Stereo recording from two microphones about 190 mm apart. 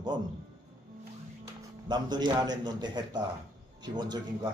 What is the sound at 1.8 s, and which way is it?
A man's voice, 25° right (ahead or behind).